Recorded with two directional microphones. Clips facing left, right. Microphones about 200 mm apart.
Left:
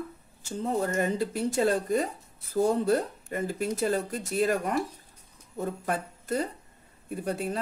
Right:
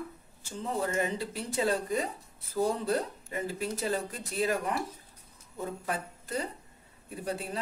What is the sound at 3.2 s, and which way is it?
Speech, 45° left (ahead or behind).